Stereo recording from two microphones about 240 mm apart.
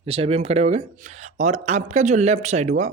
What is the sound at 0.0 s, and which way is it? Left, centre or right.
Speech, right.